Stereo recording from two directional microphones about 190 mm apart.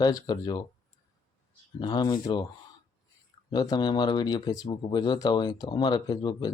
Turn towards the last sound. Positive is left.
turn(degrees=20)  # may be behind; listen again after turning